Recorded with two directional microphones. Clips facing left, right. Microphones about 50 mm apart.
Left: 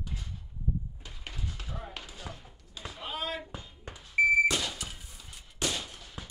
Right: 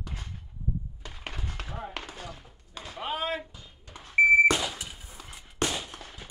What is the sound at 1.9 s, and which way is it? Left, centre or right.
Basketball bounce, right.